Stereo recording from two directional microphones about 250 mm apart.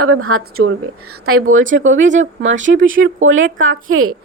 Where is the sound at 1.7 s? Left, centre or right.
Right.